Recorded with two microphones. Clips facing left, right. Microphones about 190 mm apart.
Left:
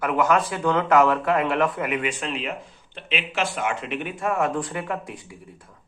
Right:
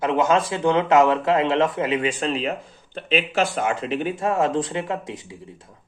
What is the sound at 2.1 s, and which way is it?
A man's voice, 35° right (ahead or behind).